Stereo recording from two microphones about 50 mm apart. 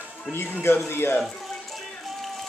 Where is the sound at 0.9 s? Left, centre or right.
Left.